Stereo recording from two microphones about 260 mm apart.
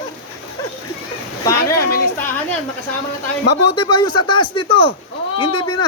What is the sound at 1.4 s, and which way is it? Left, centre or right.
Speech, centre.